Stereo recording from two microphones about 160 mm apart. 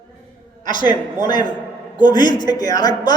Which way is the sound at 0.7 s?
30° left (ahead or behind).